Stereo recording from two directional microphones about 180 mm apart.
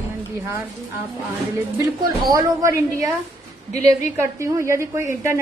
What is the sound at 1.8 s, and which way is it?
A woman's voice, 20° right (ahead or behind).